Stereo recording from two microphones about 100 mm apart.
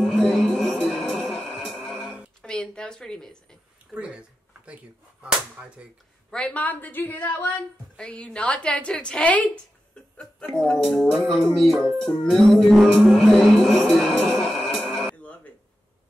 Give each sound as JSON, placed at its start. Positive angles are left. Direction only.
{"t": 0.0, "sound": "music", "side_deg": 10}
{"t": 2.0, "sound": "a sound", "side_deg": -10}
{"t": 2.4, "sound": "a sound", "side_deg": 10}
{"t": 3.9, "sound": "whip", "side_deg": -10}
{"t": 5.2, "sound": "whip", "side_deg": -10}
{"t": 6.3, "sound": "a woman's voice", "side_deg": 10}
{"t": 11.5, "sound": "music", "side_deg": 0}